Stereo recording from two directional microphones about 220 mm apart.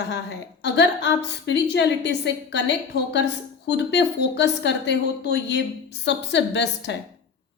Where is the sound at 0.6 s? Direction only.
50° left (ahead or behind).